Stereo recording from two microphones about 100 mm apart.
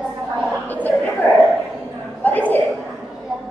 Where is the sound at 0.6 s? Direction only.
15° left (ahead or behind).